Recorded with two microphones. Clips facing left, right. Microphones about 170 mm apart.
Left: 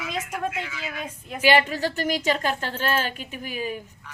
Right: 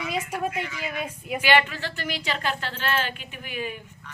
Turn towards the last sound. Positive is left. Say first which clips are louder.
# left 3 dB
turn(degrees=40)  # may be behind; listen again after turning